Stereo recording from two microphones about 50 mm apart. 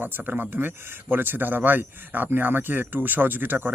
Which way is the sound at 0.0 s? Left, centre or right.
Right.